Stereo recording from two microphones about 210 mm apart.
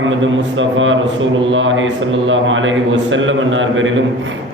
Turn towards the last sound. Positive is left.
turn(degrees=-65)  # may be behind; listen again after turning